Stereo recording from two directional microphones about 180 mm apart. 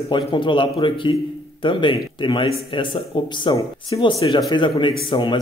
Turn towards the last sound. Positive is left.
turn(degrees=30)  # may be behind; listen again after turning